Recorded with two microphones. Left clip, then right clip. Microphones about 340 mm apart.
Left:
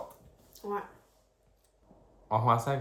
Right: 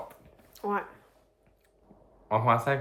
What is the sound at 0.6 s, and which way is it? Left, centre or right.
Speech, right.